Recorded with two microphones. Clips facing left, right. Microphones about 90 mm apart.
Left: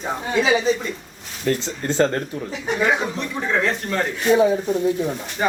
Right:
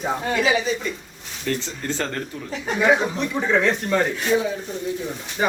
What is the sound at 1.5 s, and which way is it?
Speech, 30° left (ahead or behind).